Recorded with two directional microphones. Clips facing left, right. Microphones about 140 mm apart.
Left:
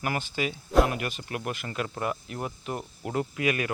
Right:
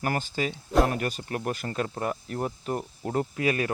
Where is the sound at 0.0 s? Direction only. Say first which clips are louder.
Right 1 dB; 40° right (ahead or behind).